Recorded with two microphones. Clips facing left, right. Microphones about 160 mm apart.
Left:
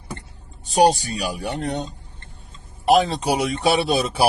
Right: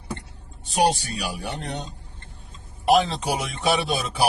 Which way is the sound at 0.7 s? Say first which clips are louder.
Left 5 dB; 40° left (ahead or behind).